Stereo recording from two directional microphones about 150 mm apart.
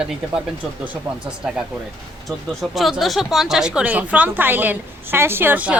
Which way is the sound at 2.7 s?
Centre (ahead or behind).